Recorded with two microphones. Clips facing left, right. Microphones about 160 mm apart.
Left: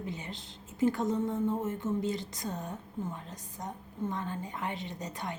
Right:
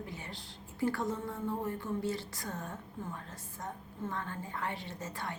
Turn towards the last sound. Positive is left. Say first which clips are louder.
# left 2 dB
turn(degrees=20)  # may be behind; listen again after turning